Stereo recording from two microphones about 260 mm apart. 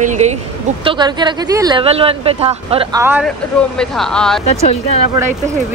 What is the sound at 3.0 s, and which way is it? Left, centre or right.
Speech, centre.